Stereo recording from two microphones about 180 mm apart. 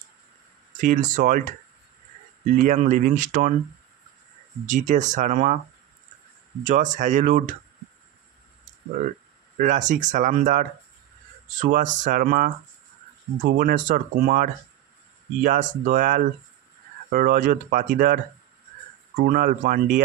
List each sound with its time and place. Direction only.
0.7 s speech: 45° right (ahead or behind)
2.5 s speech: 45° right (ahead or behind)
4.6 s speech: 45° right (ahead or behind)
6.6 s speech: 45° right (ahead or behind)
9.6 s speech: 45° right (ahead or behind)